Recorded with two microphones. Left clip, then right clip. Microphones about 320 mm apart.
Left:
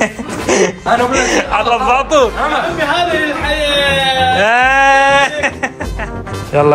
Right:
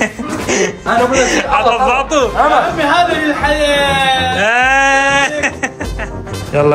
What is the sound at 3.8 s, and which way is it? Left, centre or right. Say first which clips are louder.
Speech: left 1 dB; centre.